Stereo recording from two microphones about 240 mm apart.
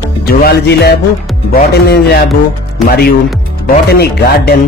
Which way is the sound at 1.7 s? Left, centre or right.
Left.